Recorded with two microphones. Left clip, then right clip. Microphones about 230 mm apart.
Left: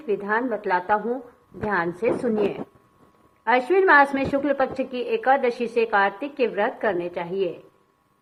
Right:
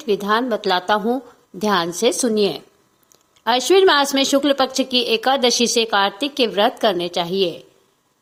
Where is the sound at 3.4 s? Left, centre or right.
Right.